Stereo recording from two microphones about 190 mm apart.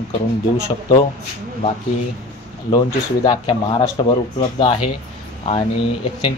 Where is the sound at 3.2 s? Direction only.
25° left (ahead or behind).